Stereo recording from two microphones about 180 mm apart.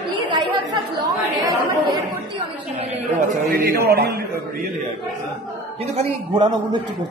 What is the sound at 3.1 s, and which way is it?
A man's voice, 55° right (ahead or behind).